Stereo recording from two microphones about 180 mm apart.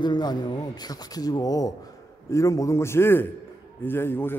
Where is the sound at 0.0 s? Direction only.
25° left (ahead or behind).